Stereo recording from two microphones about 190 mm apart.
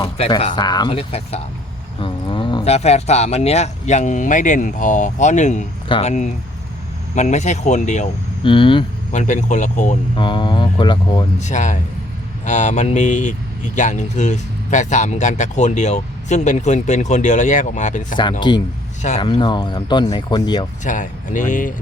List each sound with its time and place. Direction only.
0.2 s speech: 30° left (ahead or behind)
8.4 s speech: 25° left (ahead or behind)
9.1 s speech: 40° left (ahead or behind)
10.2 s speech: 25° left (ahead or behind)
11.3 s speech: 40° left (ahead or behind)
18.2 s speech: 25° left (ahead or behind)
20.8 s speech: 40° left (ahead or behind)